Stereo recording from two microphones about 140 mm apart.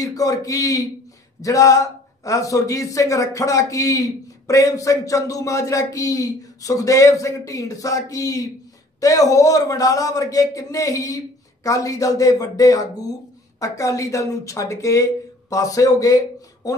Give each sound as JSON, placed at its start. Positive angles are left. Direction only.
{"t": 0.0, "sound": "a man's voice", "side_deg": 25}